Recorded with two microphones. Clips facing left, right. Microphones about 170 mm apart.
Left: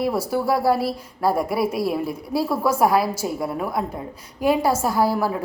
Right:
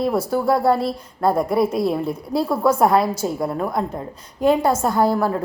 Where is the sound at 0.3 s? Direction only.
5° left (ahead or behind).